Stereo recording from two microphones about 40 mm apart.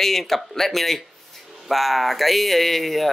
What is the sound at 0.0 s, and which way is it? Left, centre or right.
Speech, centre.